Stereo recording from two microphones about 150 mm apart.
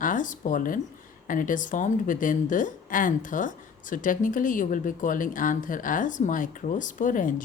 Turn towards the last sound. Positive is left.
turn(degrees=60)  # may be behind; listen again after turning